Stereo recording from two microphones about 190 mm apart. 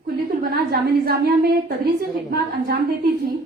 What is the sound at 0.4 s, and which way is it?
A woman's voice, 55° right (ahead or behind).